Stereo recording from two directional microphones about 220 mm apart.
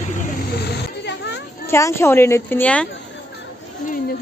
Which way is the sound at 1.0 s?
50° left (ahead or behind).